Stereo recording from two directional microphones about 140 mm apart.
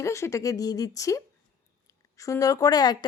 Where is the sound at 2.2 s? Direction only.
25° left (ahead or behind).